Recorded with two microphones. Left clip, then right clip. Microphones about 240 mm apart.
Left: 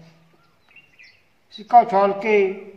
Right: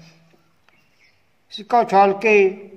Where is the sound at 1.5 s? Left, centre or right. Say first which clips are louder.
Left 3 dB; right.